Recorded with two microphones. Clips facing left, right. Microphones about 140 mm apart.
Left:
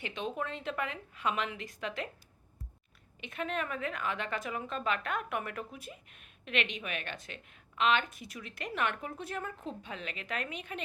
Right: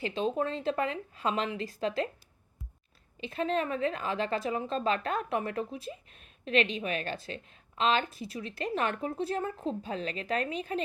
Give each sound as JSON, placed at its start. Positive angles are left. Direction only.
{"t": 0.0, "sound": "a woman's voice", "side_deg": -30}
{"t": 3.2, "sound": "a woman's voice", "side_deg": -30}